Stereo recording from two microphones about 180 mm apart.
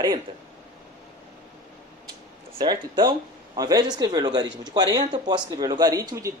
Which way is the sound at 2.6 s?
25° right (ahead or behind).